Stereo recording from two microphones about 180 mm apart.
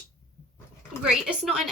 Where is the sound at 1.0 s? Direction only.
5° right (ahead or behind).